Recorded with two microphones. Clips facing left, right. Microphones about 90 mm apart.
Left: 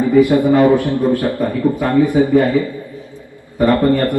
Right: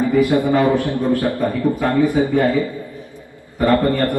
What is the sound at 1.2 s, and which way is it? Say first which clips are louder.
Speech: left 2 dB; 20° right (ahead or behind).